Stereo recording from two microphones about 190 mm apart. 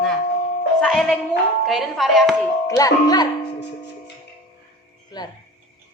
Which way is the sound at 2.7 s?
20° left (ahead or behind).